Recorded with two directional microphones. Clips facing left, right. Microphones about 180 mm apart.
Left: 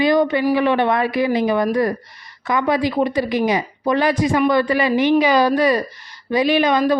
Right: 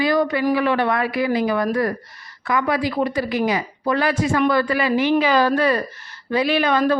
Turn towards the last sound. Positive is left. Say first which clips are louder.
# left 2 dB
turn(degrees=15)  # may be behind; listen again after turning